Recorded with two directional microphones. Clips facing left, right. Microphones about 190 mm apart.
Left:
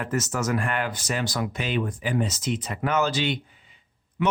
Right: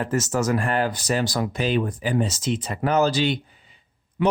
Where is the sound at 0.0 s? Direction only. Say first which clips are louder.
Right 4 dB; 30° right (ahead or behind).